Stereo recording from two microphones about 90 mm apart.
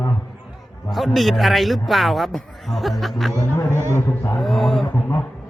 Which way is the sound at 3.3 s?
35° left (ahead or behind).